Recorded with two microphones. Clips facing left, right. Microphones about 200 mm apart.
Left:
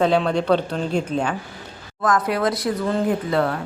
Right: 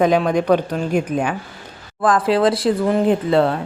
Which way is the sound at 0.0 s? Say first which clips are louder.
Right 3 dB; 10° right (ahead or behind).